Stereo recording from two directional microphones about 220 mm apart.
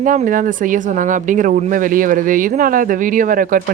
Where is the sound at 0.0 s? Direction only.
35° right (ahead or behind).